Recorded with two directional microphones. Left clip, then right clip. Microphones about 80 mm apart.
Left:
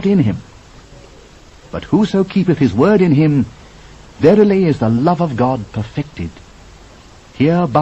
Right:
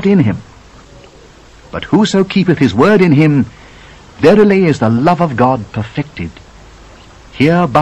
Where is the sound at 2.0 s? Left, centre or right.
Right.